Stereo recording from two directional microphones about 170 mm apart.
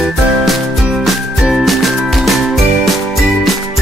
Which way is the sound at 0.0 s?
5° right (ahead or behind).